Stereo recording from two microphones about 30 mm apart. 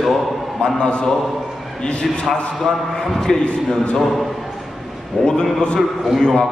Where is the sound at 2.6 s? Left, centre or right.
Centre.